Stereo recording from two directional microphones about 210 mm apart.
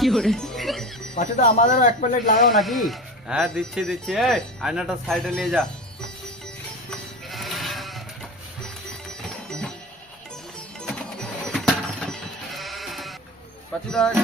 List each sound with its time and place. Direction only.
0.0 s speech: centre (ahead or behind)
1.1 s speech: 35° left (ahead or behind)
2.6 s speech: centre (ahead or behind)
7.3 s sheep: centre (ahead or behind)
9.5 s music: 5° left (ahead or behind)
10.8 s sheep: centre (ahead or behind)
13.7 s speech: 5° left (ahead or behind)